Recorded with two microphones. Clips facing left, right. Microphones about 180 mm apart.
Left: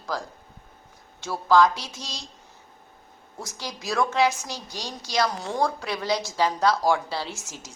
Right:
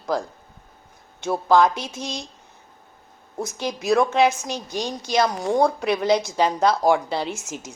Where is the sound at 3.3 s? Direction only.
20° right (ahead or behind).